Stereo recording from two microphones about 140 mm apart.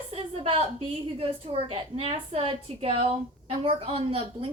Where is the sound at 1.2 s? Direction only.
45° right (ahead or behind).